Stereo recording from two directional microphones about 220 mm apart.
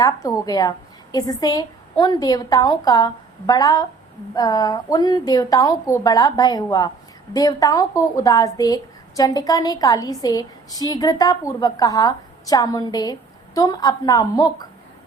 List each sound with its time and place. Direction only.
0.0 s a woman's voice: 15° left (ahead or behind)